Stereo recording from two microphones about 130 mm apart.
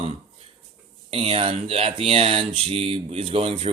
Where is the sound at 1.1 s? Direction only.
50° right (ahead or behind).